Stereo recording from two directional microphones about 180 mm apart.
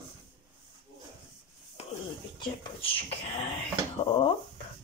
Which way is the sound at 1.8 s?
35° left (ahead or behind).